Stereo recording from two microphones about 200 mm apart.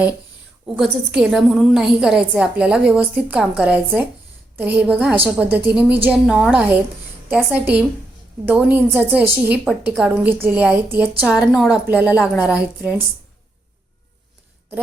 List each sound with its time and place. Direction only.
0.8 s a woman's voice: centre (ahead or behind)